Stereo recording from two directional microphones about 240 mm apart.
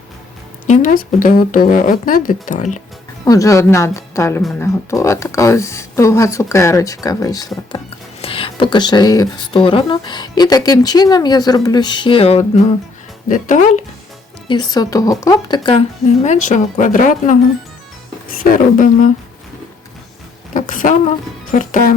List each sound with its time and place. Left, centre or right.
0.7 s speech: left
3.2 s speech: centre; by 13.8 s left
14.4 s speech: centre; by 19.1 s left
20.5 s a sound: left
21.5 s speech: left